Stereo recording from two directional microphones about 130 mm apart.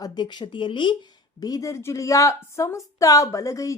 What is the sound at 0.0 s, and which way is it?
A woman's voice, 35° left (ahead or behind).